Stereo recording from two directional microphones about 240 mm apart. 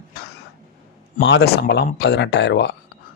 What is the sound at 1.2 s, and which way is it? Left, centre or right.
Speech, left.